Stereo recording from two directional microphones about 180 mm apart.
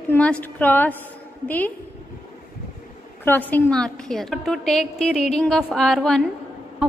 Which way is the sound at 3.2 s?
10° left (ahead or behind).